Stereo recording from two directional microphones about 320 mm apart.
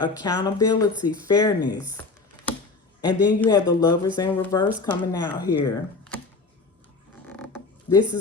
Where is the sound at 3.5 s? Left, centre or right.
Centre.